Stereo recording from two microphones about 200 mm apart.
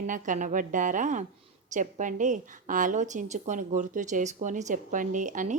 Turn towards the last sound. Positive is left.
turn(degrees=-40)  # may be behind; listen again after turning